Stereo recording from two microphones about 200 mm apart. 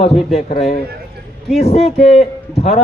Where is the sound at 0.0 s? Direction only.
30° left (ahead or behind).